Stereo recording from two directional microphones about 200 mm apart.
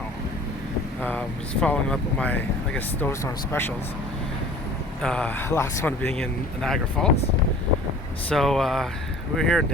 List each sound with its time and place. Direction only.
1.6 s speech: 5° left (ahead or behind)
5.0 s speech: 5° left (ahead or behind)
8.3 s speech: centre (ahead or behind)